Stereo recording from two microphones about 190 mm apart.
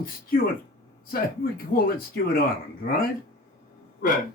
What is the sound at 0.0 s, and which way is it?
Speech, 50° left (ahead or behind).